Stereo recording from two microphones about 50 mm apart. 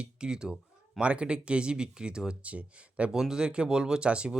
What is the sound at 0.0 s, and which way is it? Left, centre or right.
Speech, centre.